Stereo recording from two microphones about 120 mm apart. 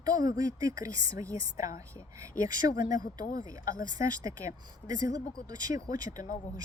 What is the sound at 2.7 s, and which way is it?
Speech, 90° left.